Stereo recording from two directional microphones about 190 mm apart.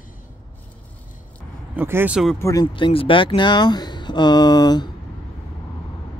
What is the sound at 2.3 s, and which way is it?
Speech, 15° left (ahead or behind).